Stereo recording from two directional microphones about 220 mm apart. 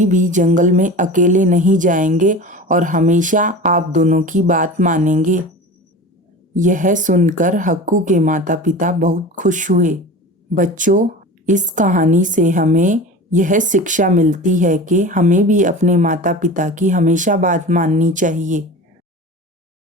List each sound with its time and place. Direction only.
0.0 s a woman's voice: 35° right (ahead or behind)
6.6 s a woman's voice: 35° right (ahead or behind)